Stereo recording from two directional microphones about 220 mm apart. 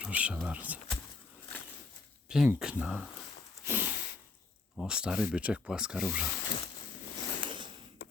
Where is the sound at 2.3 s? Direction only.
5° right (ahead or behind).